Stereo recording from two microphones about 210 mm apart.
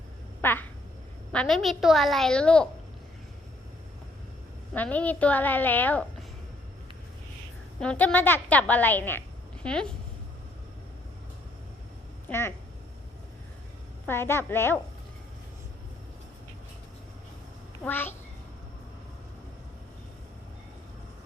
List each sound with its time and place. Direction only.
0.4 s quack: 10° left (ahead or behind)
1.3 s a woman's voice: 5° left (ahead or behind)
4.7 s a woman's voice: 5° left (ahead or behind)
7.8 s a woman's voice: 5° left (ahead or behind)
12.3 s a woman's voice: 10° left (ahead or behind)
14.1 s a woman's voice: 10° left (ahead or behind)
17.8 s a woman's voice: 10° left (ahead or behind)